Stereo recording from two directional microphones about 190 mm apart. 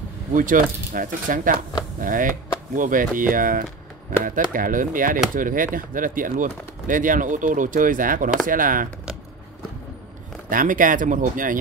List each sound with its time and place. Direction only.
0.3 s speech: 45° right (ahead or behind)
10.5 s speech: 45° right (ahead or behind)